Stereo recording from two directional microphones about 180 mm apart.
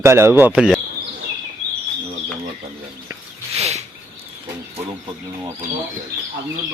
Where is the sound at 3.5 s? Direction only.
35° right (ahead or behind).